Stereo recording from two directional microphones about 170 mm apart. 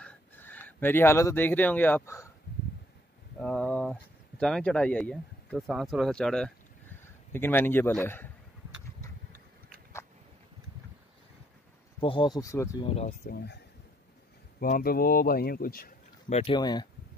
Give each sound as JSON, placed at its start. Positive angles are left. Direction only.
{"t": 0.0, "sound": "speech", "side_deg": 10}
{"t": 3.3, "sound": "a man's voice", "side_deg": 5}
{"t": 12.0, "sound": "speech", "side_deg": 30}
{"t": 13.3, "sound": "speech", "side_deg": 70}
{"t": 14.6, "sound": "speech", "side_deg": 60}
{"t": 16.3, "sound": "speech", "side_deg": 40}
{"t": 16.5, "sound": "speech", "side_deg": 25}